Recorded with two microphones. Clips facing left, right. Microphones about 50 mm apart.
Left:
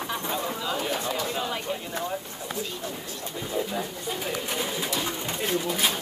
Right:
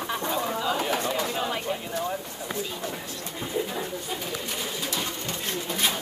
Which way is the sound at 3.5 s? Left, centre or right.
Centre.